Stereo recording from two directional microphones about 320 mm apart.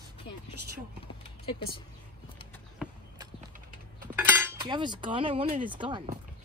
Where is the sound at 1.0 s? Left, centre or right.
Centre.